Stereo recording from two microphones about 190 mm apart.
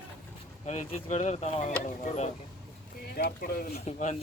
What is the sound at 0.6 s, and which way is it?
Speech, 35° left (ahead or behind).